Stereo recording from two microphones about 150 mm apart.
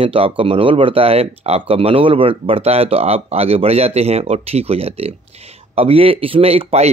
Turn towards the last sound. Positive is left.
turn(degrees=-40)  # may be behind; listen again after turning